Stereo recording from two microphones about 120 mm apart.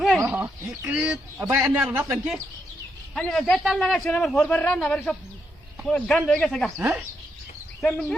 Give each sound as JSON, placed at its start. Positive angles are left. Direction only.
{"t": 0.0, "sound": "bird", "side_deg": 0}
{"t": 0.9, "sound": "a man's voice", "side_deg": -10}
{"t": 3.2, "sound": "a man's voice", "side_deg": 5}
{"t": 6.7, "sound": "speech", "side_deg": -20}
{"t": 7.9, "sound": "speech", "side_deg": 10}